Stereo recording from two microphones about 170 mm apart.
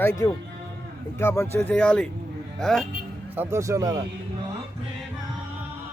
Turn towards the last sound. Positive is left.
turn(degrees=-20)  # may be behind; listen again after turning